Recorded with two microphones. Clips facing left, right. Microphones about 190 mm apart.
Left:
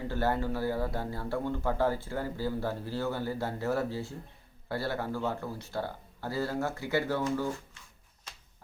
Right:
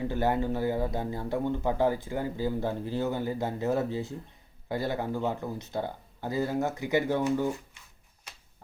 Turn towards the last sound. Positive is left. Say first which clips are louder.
# right 4 dB
turn(degrees=-15)  # may be behind; listen again after turning